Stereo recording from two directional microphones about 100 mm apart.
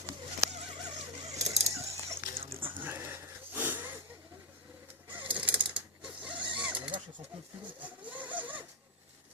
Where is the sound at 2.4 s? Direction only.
65° right (ahead or behind).